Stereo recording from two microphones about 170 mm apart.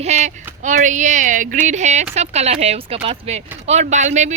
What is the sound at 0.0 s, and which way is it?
Speech, 45° right (ahead or behind).